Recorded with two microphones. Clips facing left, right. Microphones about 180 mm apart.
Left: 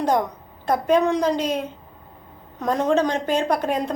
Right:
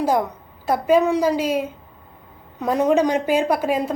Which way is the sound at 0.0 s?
5° right (ahead or behind).